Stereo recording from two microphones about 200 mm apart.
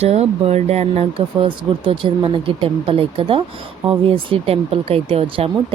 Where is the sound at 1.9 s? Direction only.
25° right (ahead or behind).